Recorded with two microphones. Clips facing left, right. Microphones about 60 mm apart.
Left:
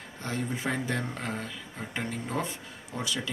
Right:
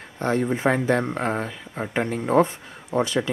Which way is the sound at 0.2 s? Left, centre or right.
Right.